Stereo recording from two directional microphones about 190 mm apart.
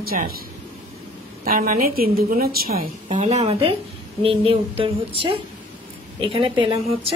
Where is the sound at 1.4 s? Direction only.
50° right (ahead or behind).